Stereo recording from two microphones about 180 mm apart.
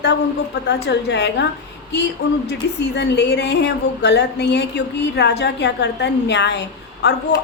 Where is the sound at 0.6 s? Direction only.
70° left (ahead or behind).